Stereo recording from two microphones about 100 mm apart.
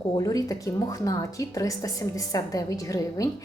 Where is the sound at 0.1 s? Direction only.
35° left (ahead or behind).